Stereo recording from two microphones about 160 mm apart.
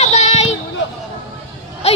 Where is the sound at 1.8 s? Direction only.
40° left (ahead or behind).